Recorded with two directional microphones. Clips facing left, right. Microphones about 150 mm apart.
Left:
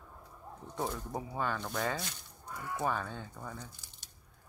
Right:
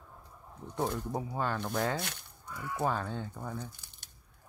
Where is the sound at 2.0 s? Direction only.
65° right (ahead or behind).